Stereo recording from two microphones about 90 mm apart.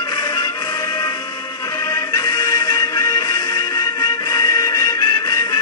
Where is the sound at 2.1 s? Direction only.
50° left (ahead or behind).